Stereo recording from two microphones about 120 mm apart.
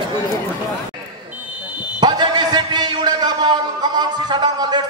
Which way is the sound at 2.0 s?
35° right (ahead or behind).